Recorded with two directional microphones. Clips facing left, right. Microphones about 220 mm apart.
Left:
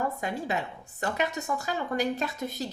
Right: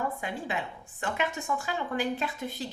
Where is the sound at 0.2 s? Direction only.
40° left (ahead or behind).